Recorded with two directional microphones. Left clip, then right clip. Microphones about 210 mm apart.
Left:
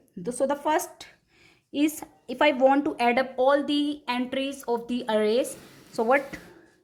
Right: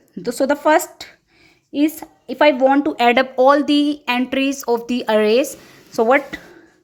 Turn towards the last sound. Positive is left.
turn(degrees=-25)  # may be behind; listen again after turning